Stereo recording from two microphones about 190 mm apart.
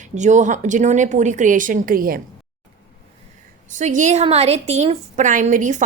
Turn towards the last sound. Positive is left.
turn(degrees=-40)  # may be behind; listen again after turning